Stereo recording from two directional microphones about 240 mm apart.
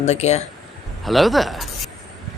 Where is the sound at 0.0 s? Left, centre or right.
Left.